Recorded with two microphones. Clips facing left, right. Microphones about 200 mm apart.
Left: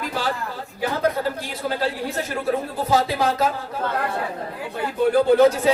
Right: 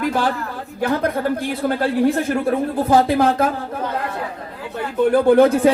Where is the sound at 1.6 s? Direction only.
55° right (ahead or behind).